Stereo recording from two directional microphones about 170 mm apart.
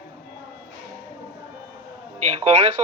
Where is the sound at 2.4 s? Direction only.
40° right (ahead or behind).